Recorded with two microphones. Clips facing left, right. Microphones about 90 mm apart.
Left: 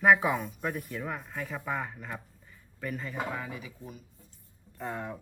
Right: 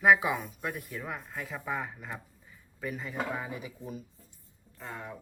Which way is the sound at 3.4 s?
20° right (ahead or behind).